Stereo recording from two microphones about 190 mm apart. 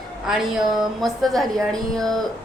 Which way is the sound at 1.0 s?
Centre (ahead or behind).